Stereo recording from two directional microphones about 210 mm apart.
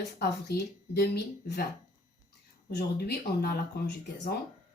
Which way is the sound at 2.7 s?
50° left (ahead or behind).